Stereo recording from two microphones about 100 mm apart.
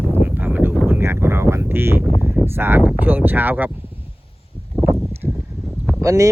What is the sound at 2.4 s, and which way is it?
Speech, 25° right (ahead or behind).